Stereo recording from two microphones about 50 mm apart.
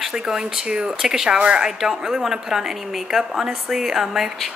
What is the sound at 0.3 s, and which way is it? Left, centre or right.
A woman's voice, centre.